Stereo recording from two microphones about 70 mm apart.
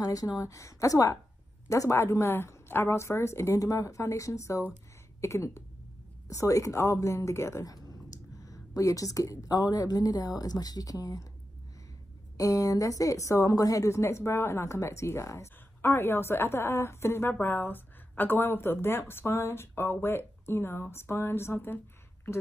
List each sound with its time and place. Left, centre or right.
0.0 s a woman's voice: left
8.5 s a woman's voice: left
12.4 s a woman's voice: left